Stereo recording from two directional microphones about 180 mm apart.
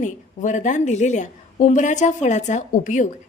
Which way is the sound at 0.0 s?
45° left (ahead or behind).